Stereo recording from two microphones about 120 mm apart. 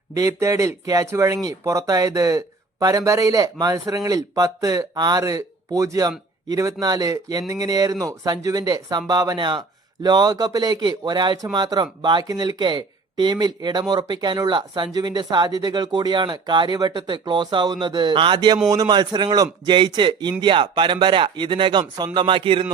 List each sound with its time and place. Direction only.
0.1 s speech: 25° right (ahead or behind); by 22.6 s 45° right (ahead or behind)